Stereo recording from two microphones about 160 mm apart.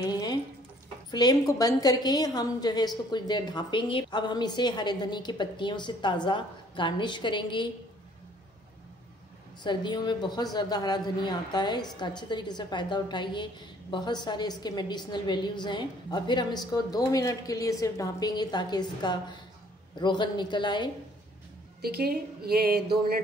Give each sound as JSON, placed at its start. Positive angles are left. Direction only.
{"t": 0.0, "sound": "a sound", "side_deg": 25}
{"t": 1.1, "sound": "a man's voice", "side_deg": 25}
{"t": 9.6, "sound": "a man's voice", "side_deg": 30}
{"t": 21.8, "sound": "speech", "side_deg": -75}